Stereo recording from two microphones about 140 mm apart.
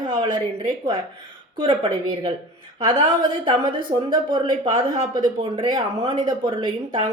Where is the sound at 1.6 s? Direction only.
35° right (ahead or behind).